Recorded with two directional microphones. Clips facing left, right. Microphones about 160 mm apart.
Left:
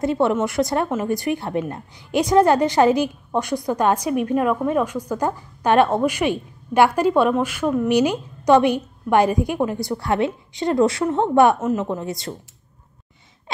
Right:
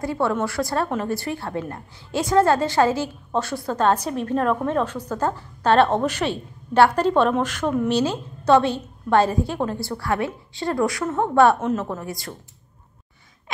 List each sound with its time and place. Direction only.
0.0 s a woman's voice: 20° left (ahead or behind)